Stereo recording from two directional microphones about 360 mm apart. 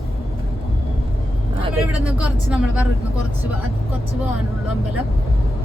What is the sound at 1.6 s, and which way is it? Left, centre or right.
Speech, centre.